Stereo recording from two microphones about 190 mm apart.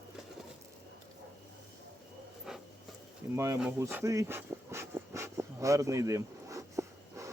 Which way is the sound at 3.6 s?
10° right (ahead or behind).